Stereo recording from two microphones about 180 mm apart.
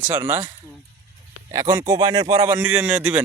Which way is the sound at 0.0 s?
10° right (ahead or behind).